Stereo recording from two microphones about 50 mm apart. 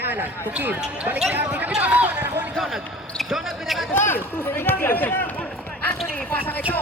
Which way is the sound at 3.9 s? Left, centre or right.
Left.